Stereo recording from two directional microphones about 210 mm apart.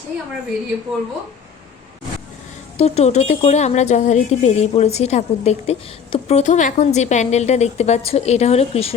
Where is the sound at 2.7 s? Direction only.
30° left (ahead or behind).